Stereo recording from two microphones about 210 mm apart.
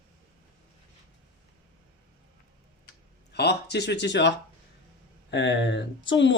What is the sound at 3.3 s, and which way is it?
Speech, 50° left (ahead or behind).